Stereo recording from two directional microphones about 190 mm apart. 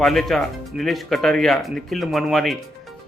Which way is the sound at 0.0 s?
Centre (ahead or behind).